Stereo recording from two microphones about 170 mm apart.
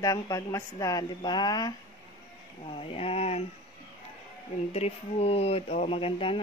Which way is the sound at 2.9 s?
35° left (ahead or behind).